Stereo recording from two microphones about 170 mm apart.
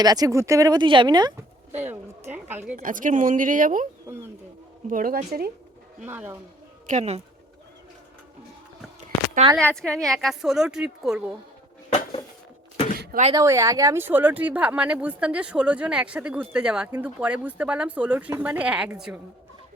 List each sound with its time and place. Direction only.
0.0 s speech: 20° right (ahead or behind)
1.7 s speech: 10° right (ahead or behind)
2.7 s speech: 50° right (ahead or behind)
4.0 s speech: 15° right (ahead or behind)
4.9 s a woman's voice: 55° right (ahead or behind)
6.0 s speech: 10° right (ahead or behind)
6.8 s speech: 40° right (ahead or behind)
9.6 s a woman's voice: 5° left (ahead or behind)
13.3 s speech: 20° right (ahead or behind)